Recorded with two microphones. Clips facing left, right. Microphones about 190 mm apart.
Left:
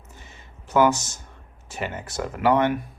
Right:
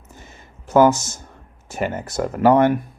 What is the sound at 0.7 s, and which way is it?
Speech, 45° right (ahead or behind).